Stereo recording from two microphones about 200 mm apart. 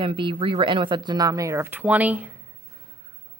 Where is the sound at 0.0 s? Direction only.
25° right (ahead or behind); by 2.3 s 10° right (ahead or behind).